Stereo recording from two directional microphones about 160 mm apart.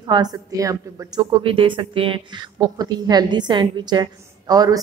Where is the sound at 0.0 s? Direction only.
25° right (ahead or behind).